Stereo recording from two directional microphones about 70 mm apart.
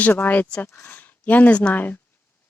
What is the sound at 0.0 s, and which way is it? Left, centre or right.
Speech, left.